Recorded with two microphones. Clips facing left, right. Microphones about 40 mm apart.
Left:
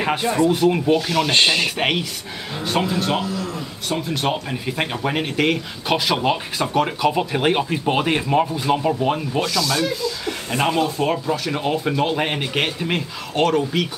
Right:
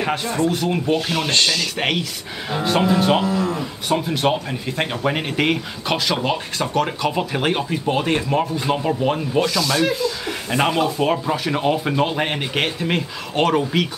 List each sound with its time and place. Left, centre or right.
0.0 s speech: centre
1.3 s speech: left
1.8 s speech: centre
2.5 s speech: centre
3.3 s speech: right
3.9 s speech: centre
5.9 s speech: centre
8.5 s speech: centre
9.8 s speech: right
10.2 s speech: centre